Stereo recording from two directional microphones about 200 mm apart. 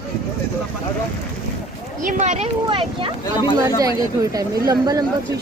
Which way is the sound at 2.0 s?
35° right (ahead or behind).